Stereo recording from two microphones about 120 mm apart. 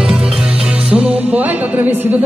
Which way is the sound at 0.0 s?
5° right (ahead or behind).